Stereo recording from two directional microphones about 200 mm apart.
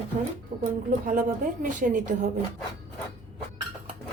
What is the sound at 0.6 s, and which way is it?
A woman's voice, 45° right (ahead or behind).